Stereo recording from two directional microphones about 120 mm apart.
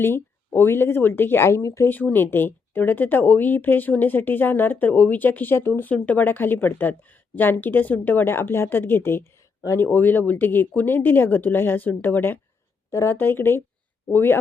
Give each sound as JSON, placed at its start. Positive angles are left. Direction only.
{"t": 0.0, "sound": "speech", "side_deg": 20}
{"t": 1.9, "sound": "speech", "side_deg": 15}